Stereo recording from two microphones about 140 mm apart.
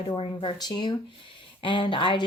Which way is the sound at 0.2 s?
35° left (ahead or behind).